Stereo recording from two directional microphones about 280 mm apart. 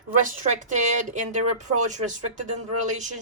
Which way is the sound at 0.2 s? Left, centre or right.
Right.